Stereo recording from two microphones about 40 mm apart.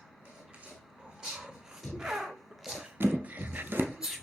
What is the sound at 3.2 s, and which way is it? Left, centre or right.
Wood, right.